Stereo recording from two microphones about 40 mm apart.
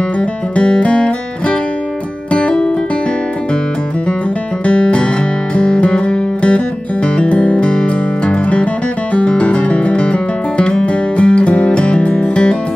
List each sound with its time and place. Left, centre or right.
0.2 s music: left
4.6 s music: left